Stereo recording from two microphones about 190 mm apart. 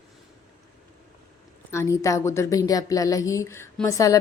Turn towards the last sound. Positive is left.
turn(degrees=20)  # may be behind; listen again after turning